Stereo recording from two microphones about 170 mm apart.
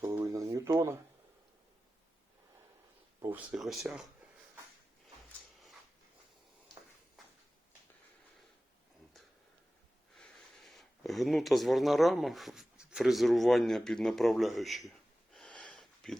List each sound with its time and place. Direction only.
0.0 s a sound: 15° right (ahead or behind)
3.2 s speech: 10° right (ahead or behind)
10.2 s speech: 5° left (ahead or behind)